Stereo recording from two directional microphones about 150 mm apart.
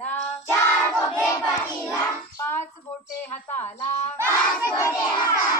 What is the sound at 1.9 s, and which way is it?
Hands, 20° left (ahead or behind).